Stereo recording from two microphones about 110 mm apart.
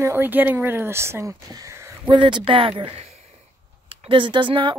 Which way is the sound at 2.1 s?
45° right (ahead or behind).